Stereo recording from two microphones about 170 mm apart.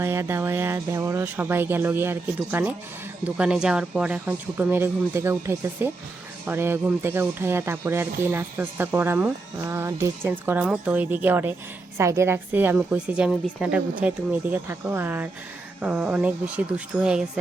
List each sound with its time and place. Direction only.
0.0 s speech: 15° right (ahead or behind)